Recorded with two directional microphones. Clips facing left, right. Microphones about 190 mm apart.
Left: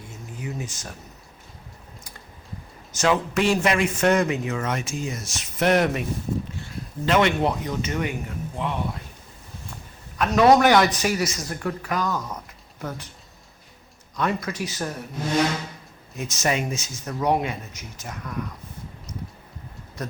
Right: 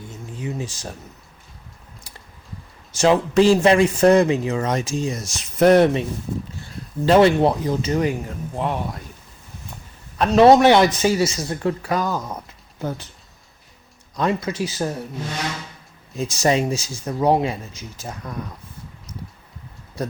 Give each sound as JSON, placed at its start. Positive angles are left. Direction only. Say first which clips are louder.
{"t": 0.3, "sound": "speech", "louder": "right 4 dB", "side_deg": -30}
{"t": 2.9, "sound": "speech", "louder": "right 6 dB", "side_deg": -30}
{"t": 10.2, "sound": "a man's voice", "louder": "right 4 dB", "side_deg": -30}
{"t": 14.2, "sound": "a man's voice", "louder": "right 4 dB", "side_deg": -25}
{"t": 16.1, "sound": "a man's voice", "louder": "right 6 dB", "side_deg": -30}